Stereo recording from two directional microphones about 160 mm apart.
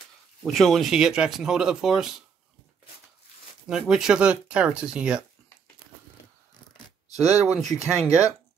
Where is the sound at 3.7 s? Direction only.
5° right (ahead or behind).